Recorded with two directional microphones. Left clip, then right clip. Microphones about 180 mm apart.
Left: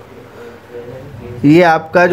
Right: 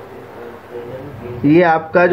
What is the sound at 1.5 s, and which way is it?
Speech, 25° left (ahead or behind).